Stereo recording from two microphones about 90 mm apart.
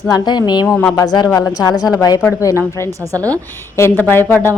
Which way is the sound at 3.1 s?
40° right (ahead or behind).